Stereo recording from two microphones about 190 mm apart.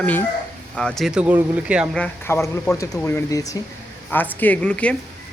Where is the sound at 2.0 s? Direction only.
15° left (ahead or behind).